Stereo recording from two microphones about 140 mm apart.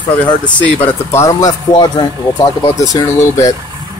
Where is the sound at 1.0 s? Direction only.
20° left (ahead or behind).